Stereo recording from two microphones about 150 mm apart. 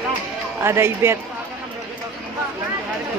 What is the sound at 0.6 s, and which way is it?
Speech, 15° right (ahead or behind).